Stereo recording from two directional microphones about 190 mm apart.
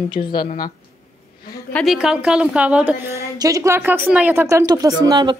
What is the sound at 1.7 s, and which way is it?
A woman's voice, centre (ahead or behind).